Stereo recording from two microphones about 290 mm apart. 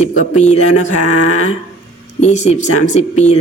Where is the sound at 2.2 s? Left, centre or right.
Left.